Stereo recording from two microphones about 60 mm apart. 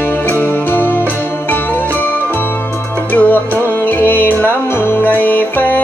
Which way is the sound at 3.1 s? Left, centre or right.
Left.